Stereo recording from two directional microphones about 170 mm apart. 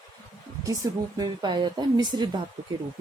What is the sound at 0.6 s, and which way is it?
A woman's voice, 20° right (ahead or behind).